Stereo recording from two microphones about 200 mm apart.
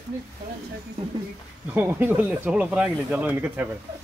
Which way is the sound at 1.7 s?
10° right (ahead or behind).